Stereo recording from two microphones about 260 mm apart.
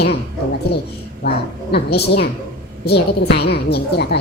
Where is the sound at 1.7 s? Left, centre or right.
Left.